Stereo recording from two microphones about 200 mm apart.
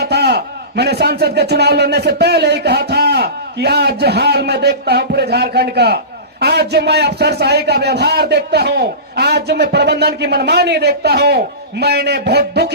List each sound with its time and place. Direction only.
0.0 s a man's voice: 55° right (ahead or behind)